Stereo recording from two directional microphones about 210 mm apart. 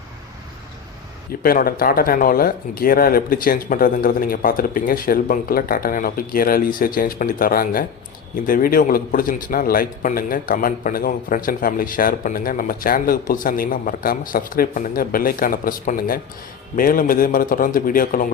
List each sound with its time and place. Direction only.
1.4 s a man's voice: 45° left (ahead or behind)